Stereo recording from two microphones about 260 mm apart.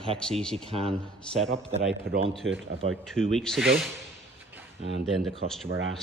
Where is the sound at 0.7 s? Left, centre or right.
Right.